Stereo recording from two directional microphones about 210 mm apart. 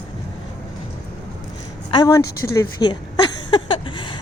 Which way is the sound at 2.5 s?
15° left (ahead or behind).